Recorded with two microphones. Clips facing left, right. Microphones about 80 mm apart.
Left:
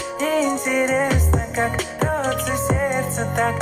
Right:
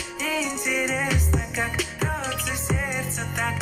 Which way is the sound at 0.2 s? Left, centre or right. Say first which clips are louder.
Left 8 dB; left.